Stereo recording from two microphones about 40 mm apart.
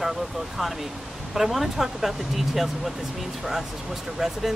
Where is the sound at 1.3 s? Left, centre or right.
Centre.